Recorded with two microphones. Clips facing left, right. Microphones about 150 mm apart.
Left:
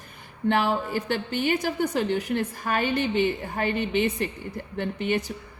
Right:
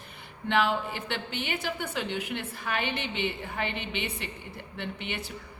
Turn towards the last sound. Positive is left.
turn(degrees=40)  # may be behind; listen again after turning